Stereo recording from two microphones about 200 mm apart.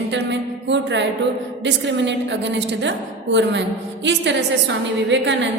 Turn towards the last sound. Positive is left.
turn(degrees=-65)  # may be behind; listen again after turning